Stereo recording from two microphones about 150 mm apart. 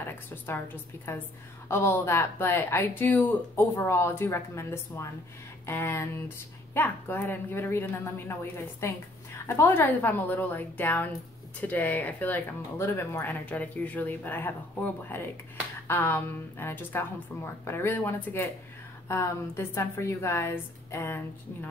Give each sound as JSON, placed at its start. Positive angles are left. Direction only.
{"t": 1.1, "sound": "speech", "side_deg": 20}